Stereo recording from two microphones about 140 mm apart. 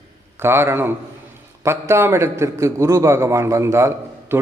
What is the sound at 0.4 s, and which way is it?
A man's voice, 15° right (ahead or behind).